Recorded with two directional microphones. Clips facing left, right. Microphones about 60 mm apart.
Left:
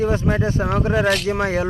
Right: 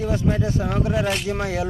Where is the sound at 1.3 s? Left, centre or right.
Left.